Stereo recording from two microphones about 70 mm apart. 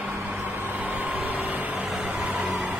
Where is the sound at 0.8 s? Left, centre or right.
Right.